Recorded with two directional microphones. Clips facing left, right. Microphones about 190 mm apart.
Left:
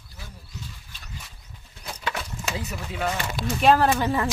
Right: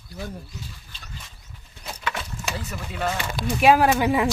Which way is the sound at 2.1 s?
5° left (ahead or behind).